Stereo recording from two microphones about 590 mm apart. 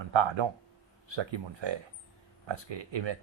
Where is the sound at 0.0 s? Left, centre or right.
Right.